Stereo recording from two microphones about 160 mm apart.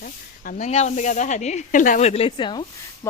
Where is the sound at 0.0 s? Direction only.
60° left (ahead or behind).